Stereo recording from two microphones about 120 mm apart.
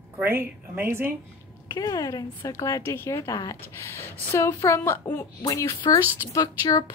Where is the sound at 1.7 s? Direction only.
30° left (ahead or behind); by 5.2 s 15° left (ahead or behind).